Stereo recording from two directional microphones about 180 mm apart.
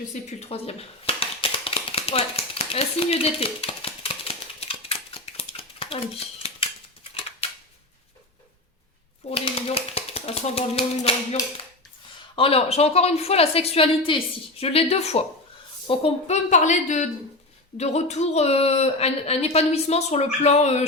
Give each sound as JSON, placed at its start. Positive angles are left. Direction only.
{"t": 0.1, "sound": "a sound", "side_deg": 40}
{"t": 7.1, "sound": "scissors", "side_deg": 30}
{"t": 9.3, "sound": "typewriter", "side_deg": 30}
{"t": 12.4, "sound": "a woman's voice", "side_deg": 30}